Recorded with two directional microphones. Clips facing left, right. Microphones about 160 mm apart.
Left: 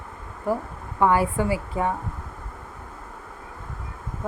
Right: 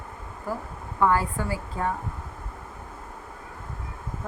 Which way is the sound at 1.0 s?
20° left (ahead or behind).